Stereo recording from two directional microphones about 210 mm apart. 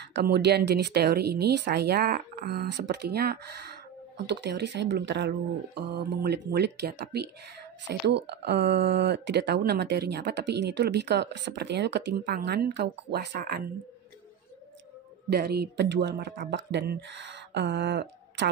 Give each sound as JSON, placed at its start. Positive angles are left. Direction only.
{"t": 0.0, "sound": "speech", "side_deg": -50}
{"t": 15.2, "sound": "speech", "side_deg": -50}